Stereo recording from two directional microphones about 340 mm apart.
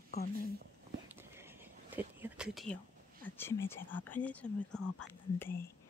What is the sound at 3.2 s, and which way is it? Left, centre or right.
Speech, centre.